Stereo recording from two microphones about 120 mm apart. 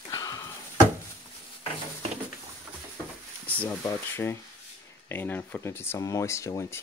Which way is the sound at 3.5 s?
15° left (ahead or behind).